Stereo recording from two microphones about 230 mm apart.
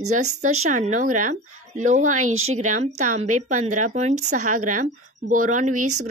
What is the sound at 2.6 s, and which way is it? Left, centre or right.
A woman's voice, right.